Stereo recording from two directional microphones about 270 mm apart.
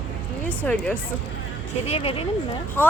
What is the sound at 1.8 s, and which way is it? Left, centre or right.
Speech, left.